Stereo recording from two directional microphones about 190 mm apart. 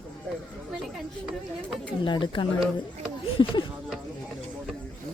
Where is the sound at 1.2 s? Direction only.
Centre (ahead or behind).